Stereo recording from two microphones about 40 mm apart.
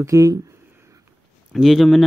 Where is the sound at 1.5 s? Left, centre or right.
Centre.